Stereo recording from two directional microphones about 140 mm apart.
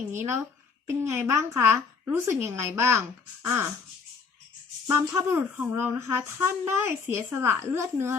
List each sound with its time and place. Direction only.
0.9 s a woman's voice: 20° right (ahead or behind)
4.9 s speech: 20° right (ahead or behind)